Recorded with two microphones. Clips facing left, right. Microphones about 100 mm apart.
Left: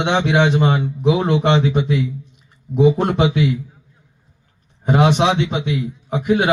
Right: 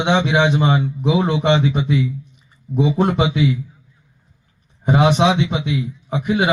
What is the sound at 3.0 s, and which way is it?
Speech, 15° right (ahead or behind).